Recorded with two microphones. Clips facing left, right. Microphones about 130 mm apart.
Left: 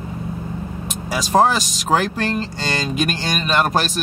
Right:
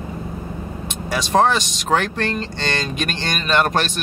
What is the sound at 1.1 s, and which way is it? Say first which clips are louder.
Speech: left 1 dB; centre (ahead or behind).